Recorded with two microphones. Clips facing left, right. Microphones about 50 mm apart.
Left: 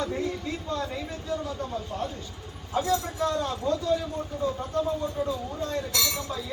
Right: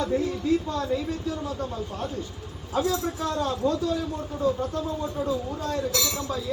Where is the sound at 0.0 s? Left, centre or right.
Left.